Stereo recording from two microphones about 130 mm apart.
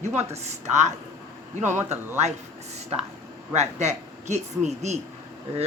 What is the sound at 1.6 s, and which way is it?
Speech, 15° right (ahead or behind).